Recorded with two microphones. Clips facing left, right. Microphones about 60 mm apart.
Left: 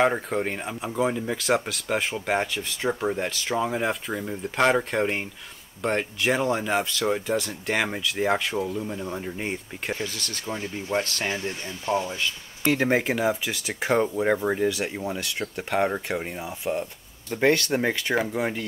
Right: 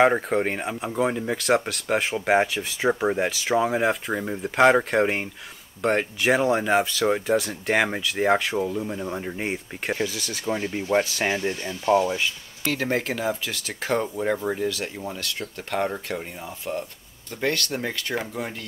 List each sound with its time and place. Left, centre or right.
0.0 s speech: centre
4.1 s speech: centre
4.4 s speech: centre
10.6 s speech: right
11.8 s speech: right
12.6 s speech: centre